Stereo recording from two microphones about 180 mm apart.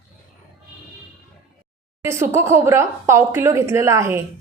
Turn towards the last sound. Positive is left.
turn(degrees=-15)  # may be behind; listen again after turning